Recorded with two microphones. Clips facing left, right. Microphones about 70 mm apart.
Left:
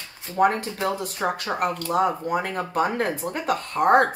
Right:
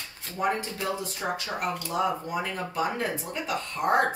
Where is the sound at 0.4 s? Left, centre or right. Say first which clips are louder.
Left 7 dB; left.